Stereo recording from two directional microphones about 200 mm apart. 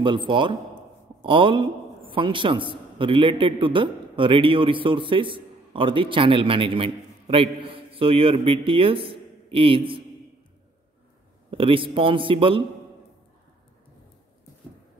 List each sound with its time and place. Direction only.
0.3 s a man's voice: 25° right (ahead or behind)
11.5 s a man's voice: 25° right (ahead or behind)